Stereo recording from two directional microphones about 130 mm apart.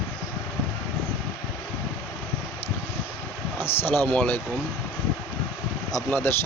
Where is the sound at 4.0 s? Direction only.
10° left (ahead or behind).